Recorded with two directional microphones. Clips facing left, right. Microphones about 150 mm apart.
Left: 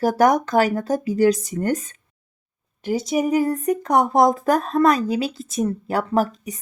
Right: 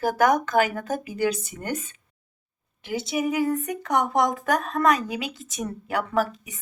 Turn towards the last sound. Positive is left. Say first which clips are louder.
# left 4 dB
turn(degrees=40)  # may be behind; listen again after turning